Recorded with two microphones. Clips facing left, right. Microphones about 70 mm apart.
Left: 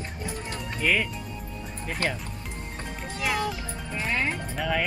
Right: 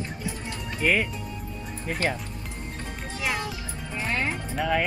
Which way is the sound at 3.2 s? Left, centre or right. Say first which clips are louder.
Left 2 dB; centre.